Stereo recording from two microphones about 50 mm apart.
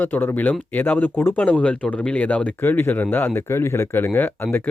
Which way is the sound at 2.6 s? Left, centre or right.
Left.